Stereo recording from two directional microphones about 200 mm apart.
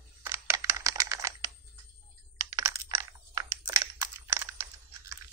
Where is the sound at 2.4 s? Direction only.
15° right (ahead or behind).